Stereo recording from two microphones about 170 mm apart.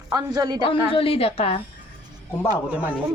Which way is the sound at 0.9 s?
35° left (ahead or behind).